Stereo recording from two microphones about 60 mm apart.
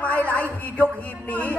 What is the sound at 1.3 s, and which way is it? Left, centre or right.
Speech, left.